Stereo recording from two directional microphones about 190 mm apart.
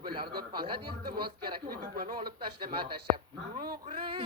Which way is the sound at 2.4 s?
25° right (ahead or behind).